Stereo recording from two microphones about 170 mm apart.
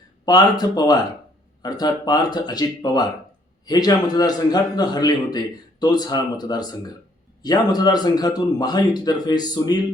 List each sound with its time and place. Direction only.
0.3 s a man's voice: 25° left (ahead or behind)